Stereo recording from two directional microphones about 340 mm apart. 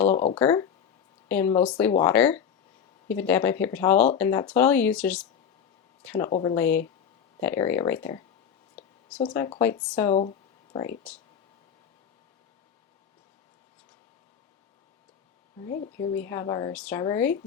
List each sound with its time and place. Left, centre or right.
0.1 s speech: left
0.3 s speech: centre
9.1 s speech: centre
10.2 s a sound: centre
10.8 s speech: centre
16.0 s speech: centre